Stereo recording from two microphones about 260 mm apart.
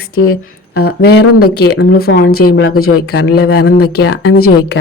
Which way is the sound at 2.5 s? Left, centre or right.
Left.